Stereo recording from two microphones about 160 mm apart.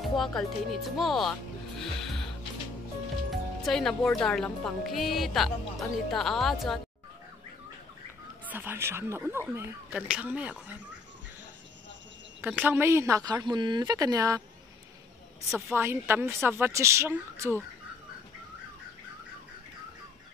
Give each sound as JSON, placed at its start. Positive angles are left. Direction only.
{"t": 0.0, "sound": "speech", "side_deg": 0}
{"t": 1.8, "sound": "music", "side_deg": 0}
{"t": 3.3, "sound": "speech", "side_deg": 0}
{"t": 8.5, "sound": "speech", "side_deg": -10}
{"t": 12.4, "sound": "a woman's voice", "side_deg": -10}
{"t": 15.5, "sound": "speech", "side_deg": -15}